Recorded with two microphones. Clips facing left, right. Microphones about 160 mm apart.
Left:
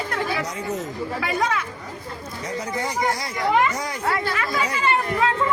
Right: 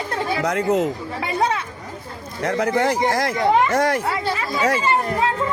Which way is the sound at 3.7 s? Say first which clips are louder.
Right 10 dB; 90° right.